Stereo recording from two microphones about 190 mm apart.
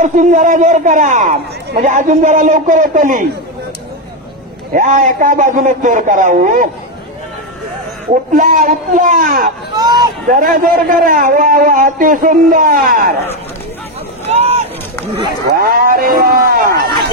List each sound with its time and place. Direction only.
0.0 s a man's voice: 40° right (ahead or behind)
4.7 s a man's voice: 40° right (ahead or behind)
8.1 s a man's voice: 45° right (ahead or behind)
14.2 s boat: 35° right (ahead or behind)
15.4 s a man's voice: 55° right (ahead or behind)